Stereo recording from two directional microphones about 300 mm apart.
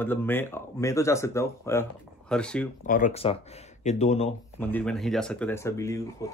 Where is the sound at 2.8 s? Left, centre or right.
Left.